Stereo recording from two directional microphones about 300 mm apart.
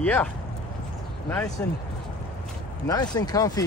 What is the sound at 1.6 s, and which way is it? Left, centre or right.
Speech, centre.